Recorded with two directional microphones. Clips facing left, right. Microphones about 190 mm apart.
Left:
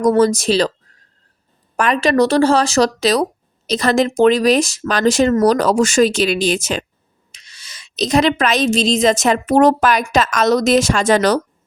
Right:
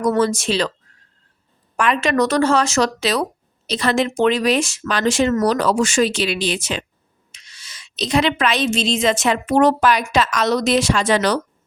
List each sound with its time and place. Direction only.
0.0 s speech: 40° left (ahead or behind)
1.7 s a woman's voice: 40° left (ahead or behind)